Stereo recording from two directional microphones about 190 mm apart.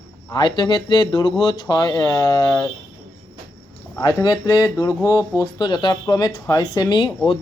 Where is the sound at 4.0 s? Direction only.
20° left (ahead or behind).